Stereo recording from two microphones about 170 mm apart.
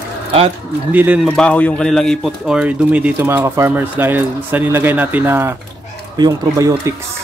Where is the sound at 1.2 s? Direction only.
5° left (ahead or behind); by 6.9 s 20° right (ahead or behind).